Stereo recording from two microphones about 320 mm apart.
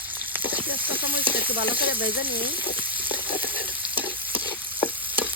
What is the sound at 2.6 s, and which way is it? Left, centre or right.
Frying, centre.